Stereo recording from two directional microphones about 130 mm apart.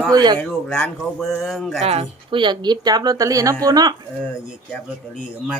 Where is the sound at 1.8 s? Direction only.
50° right (ahead or behind); by 3.9 s 30° right (ahead or behind).